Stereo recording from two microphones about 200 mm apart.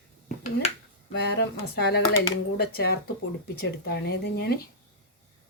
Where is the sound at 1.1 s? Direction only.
55° left (ahead or behind).